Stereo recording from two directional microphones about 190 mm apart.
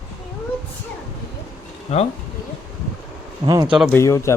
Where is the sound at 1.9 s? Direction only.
35° left (ahead or behind).